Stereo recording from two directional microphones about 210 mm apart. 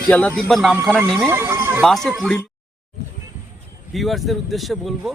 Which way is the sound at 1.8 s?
Centre (ahead or behind).